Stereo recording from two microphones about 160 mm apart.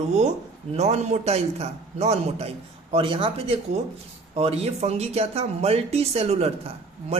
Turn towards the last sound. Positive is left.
turn(degrees=-40)  # may be behind; listen again after turning